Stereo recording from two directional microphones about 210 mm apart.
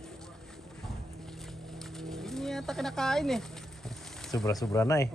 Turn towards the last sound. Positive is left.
turn(degrees=15)  # may be behind; listen again after turning